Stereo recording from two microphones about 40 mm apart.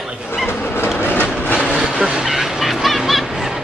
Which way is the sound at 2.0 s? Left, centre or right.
Right.